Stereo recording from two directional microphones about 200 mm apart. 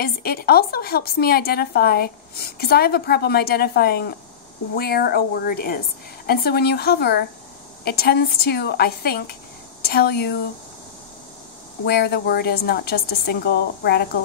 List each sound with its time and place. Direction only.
0.0 s a woman's voice: 50° left (ahead or behind)
11.8 s a woman's voice: 55° left (ahead or behind)